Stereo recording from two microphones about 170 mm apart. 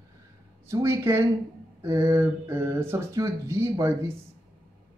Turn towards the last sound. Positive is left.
turn(degrees=-15)  # may be behind; listen again after turning